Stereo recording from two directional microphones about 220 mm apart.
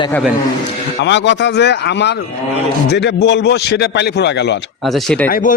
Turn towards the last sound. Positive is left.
turn(degrees=40)  # may be behind; listen again after turning